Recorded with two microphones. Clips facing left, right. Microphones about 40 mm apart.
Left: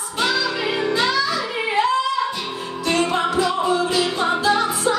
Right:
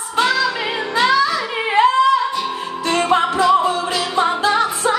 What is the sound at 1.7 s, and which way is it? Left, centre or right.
Singing, right.